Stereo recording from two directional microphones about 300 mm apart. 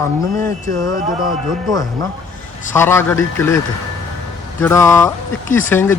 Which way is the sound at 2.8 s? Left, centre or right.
Centre.